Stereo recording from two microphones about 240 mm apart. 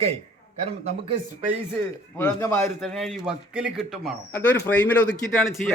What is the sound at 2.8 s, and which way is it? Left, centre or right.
Speech, centre.